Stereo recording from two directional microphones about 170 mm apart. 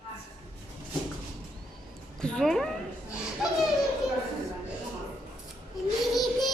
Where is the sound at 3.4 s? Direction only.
5° right (ahead or behind).